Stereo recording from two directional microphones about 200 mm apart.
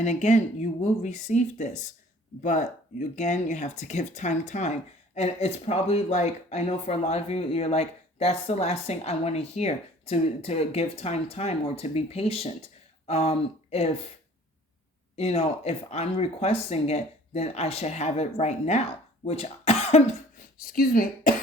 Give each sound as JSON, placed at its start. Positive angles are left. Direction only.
{"t": 0.0, "sound": "speech", "side_deg": 35}
{"t": 15.1, "sound": "speech", "side_deg": 30}
{"t": 20.7, "sound": "speech", "side_deg": 45}